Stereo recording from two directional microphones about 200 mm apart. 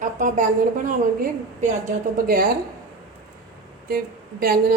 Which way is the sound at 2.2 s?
45° right (ahead or behind).